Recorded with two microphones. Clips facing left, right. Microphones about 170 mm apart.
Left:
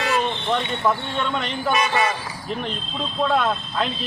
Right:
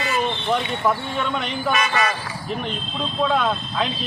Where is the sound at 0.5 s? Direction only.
5° right (ahead or behind).